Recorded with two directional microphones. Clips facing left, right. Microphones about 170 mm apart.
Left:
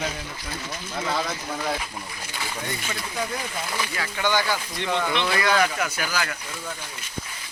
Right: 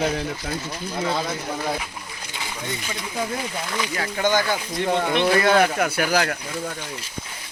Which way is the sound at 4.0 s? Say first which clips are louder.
Right 3 dB; 40° right (ahead or behind).